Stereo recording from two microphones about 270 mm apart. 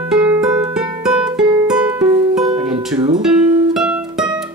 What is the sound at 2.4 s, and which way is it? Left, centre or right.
Music, centre.